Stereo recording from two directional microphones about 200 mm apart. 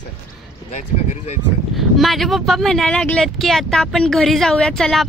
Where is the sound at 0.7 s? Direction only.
35° left (ahead or behind).